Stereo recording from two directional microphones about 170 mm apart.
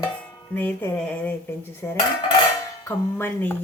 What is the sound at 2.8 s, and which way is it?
Dishes, 15° left (ahead or behind).